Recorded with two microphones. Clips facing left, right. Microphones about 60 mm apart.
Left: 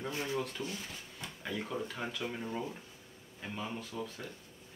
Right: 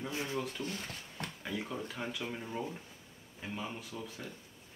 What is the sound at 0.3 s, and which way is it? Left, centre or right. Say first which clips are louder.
Speech: left 1 dB; centre.